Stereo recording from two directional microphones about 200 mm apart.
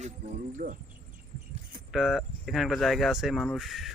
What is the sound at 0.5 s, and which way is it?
Speech, 40° right (ahead or behind).